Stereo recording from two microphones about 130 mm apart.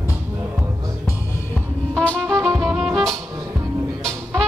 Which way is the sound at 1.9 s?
10° left (ahead or behind).